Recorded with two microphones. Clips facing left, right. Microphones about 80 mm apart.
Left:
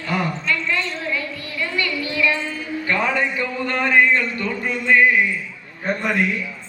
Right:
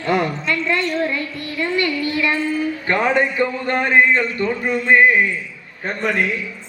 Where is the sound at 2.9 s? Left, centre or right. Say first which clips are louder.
Right 5 dB; right.